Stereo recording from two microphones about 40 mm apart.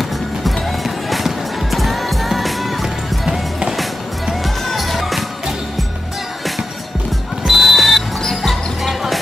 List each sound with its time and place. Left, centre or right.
0.7 s music: centre
3.3 s music: centre
4.6 s music: centre
7.4 s music: centre
8.3 s basketball bounce: centre